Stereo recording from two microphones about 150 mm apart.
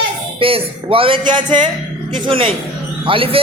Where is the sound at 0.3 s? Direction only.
40° right (ahead or behind).